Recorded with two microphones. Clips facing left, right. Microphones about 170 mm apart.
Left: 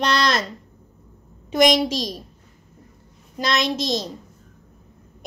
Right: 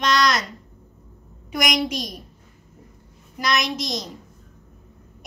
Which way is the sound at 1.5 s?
25° left (ahead or behind).